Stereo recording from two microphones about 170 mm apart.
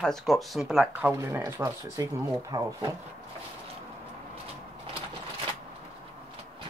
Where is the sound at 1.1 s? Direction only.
20° right (ahead or behind).